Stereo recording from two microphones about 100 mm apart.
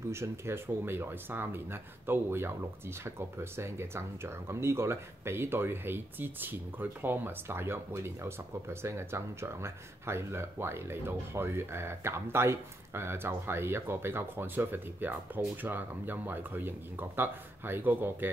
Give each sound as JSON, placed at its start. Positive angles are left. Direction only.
{"t": 0.1, "sound": "speech", "side_deg": -25}